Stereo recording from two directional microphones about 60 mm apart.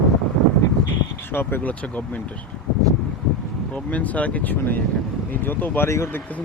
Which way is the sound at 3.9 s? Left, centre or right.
Left.